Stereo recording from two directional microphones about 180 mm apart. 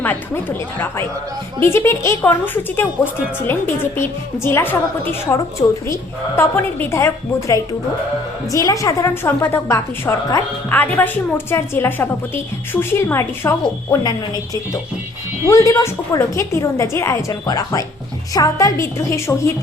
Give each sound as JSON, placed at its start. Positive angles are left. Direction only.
{"t": 1.6, "sound": "a woman's voice", "side_deg": 15}